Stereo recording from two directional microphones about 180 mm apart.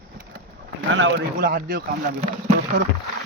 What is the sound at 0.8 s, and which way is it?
Speech, 85° right.